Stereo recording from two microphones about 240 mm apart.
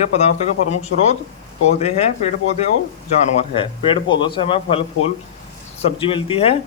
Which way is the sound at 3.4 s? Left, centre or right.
Left.